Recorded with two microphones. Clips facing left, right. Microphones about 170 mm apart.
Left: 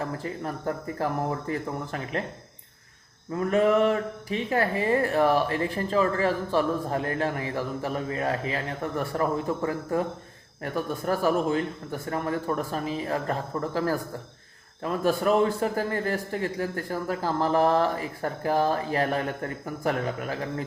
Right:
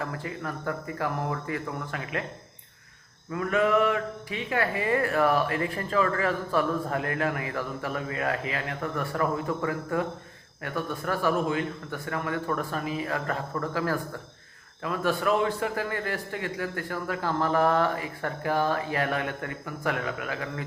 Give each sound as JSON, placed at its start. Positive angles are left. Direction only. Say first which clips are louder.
{"t": 0.0, "sound": "a man's voice", "louder": "left 2 dB", "side_deg": 35}
{"t": 3.3, "sound": "a man's voice", "louder": "left 2 dB", "side_deg": 35}